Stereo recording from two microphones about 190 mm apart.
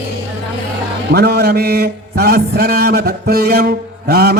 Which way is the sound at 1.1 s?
60° right (ahead or behind).